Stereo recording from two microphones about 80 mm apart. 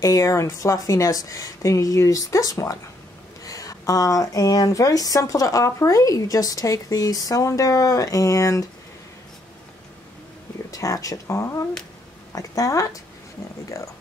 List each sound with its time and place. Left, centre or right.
0.0 s speech: left
10.7 s speech: left